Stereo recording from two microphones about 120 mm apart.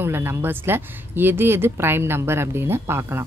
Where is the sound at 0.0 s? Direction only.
20° right (ahead or behind).